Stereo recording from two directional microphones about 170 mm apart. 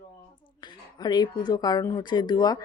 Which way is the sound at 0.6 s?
25° left (ahead or behind).